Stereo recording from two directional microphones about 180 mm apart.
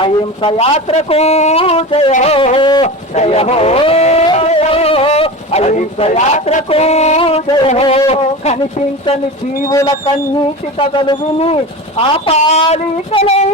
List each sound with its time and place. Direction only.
0.0 s speech: 25° left (ahead or behind)
2.8 s a man's voice: 35° left (ahead or behind)
9.6 s a man's voice: 20° left (ahead or behind); by 13.5 s 35° left (ahead or behind)